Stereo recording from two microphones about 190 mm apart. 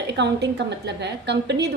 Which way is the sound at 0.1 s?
65° right (ahead or behind).